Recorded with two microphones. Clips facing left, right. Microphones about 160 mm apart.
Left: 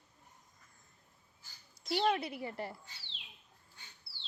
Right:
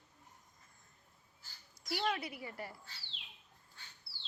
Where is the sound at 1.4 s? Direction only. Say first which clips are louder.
Even; 25° left (ahead or behind).